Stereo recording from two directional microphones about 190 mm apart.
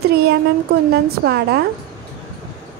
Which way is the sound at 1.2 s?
60° right (ahead or behind).